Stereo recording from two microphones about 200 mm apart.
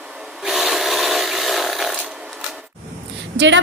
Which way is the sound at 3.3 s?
65° right (ahead or behind).